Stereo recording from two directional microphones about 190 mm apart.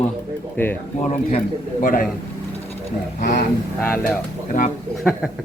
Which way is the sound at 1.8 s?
45° left (ahead or behind).